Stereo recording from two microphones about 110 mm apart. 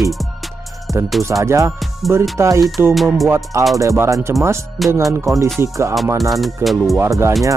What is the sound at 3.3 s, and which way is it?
Music, 30° right (ahead or behind).